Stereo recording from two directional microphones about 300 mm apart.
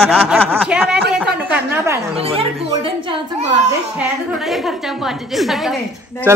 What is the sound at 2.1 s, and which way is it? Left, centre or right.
A child's voice, centre.